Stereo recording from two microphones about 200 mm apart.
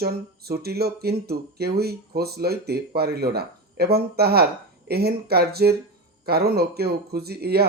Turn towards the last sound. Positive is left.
turn(degrees=-50)  # may be behind; listen again after turning